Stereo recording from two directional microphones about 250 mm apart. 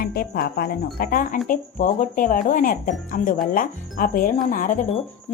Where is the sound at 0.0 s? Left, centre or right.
Left.